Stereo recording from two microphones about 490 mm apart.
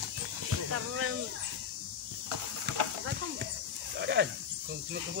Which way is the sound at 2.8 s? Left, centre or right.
Right.